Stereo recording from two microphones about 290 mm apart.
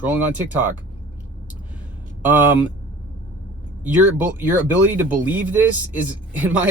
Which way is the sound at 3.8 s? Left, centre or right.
Centre.